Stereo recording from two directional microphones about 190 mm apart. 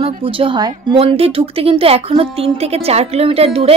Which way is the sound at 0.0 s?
30° right (ahead or behind).